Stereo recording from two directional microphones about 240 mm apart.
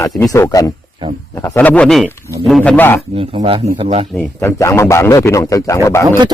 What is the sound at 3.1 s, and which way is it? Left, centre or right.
Speech, right.